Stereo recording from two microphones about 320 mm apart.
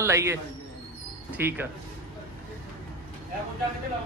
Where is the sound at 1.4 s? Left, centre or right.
Centre.